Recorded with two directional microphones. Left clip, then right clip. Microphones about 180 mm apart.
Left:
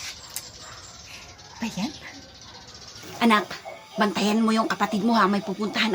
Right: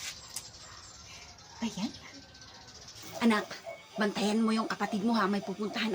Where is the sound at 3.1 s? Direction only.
20° left (ahead or behind).